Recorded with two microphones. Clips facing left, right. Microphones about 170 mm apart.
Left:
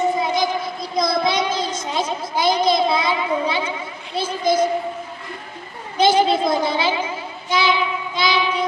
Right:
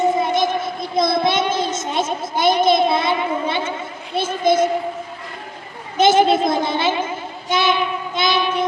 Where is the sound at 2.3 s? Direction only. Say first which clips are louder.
Right 2 dB; 55° right (ahead or behind).